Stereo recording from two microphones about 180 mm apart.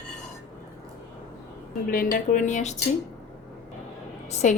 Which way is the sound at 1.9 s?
50° left (ahead or behind).